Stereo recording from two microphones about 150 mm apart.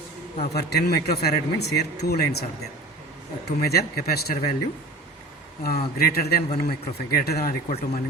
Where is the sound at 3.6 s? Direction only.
90° left.